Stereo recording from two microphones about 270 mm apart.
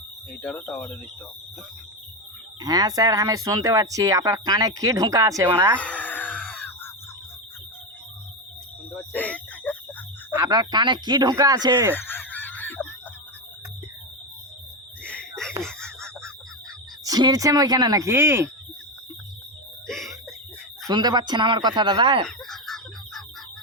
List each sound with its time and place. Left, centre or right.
0.4 s speech: centre
2.6 s speech: centre
5.8 s a sound: centre
9.1 s a sound: centre
10.3 s speech: centre
11.9 s goose: centre
15.0 s a sound: centre
17.0 s speech: centre
20.8 s speech: centre
22.3 s fowl: centre